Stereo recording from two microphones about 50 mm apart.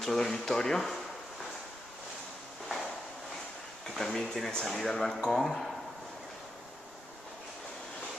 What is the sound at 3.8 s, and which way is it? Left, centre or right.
Speech, centre.